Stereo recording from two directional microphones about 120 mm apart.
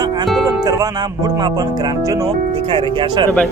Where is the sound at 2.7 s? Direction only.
45° right (ahead or behind).